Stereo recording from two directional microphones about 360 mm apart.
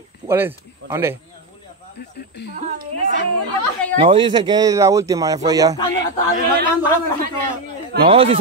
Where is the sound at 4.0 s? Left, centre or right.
Centre.